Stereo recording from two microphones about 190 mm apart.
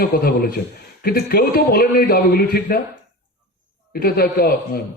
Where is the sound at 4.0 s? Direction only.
55° left (ahead or behind).